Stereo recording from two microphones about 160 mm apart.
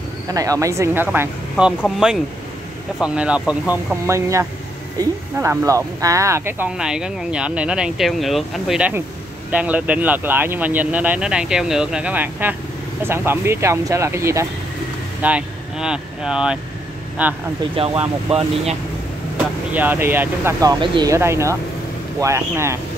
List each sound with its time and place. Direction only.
0.3 s speech: 20° right (ahead or behind)
6.8 s speech: 5° right (ahead or behind)
15.2 s speech: 5° right (ahead or behind)
17.8 s speech: 35° right (ahead or behind)
19.7 s speech: 10° right (ahead or behind)
20.8 s speech: 30° right (ahead or behind)
21.1 s speech: 15° right (ahead or behind)